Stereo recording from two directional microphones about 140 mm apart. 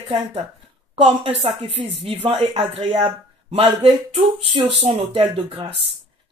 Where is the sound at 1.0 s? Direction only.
40° right (ahead or behind).